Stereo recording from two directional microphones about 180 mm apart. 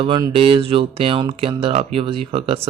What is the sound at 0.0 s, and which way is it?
Speech, 30° right (ahead or behind).